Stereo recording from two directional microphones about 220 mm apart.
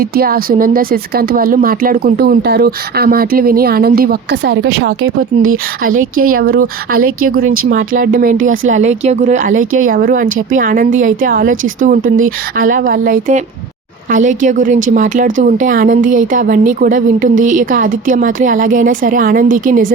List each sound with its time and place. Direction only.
0.0 s speech: 45° right (ahead or behind); by 5.5 s 65° right (ahead or behind)
6.3 s a woman's voice: 40° right (ahead or behind)